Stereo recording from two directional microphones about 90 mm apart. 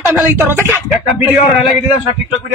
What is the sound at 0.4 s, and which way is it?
Speech, 25° right (ahead or behind).